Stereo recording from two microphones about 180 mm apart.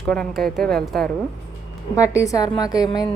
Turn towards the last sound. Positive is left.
turn(degrees=20)  # may be behind; listen again after turning